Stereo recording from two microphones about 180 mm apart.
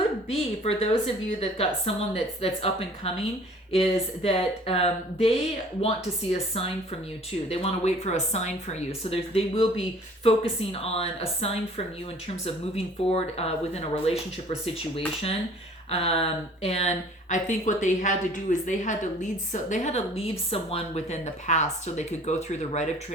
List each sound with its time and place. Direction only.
0.3 s a woman's voice: 35° left (ahead or behind)
6.3 s a woman's voice: 35° left (ahead or behind)